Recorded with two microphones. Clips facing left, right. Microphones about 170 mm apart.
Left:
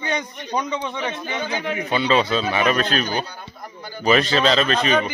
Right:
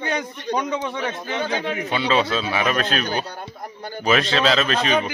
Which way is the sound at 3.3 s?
55° right (ahead or behind).